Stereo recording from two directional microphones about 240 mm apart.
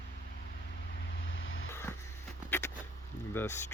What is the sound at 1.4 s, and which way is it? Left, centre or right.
Vehicle, left.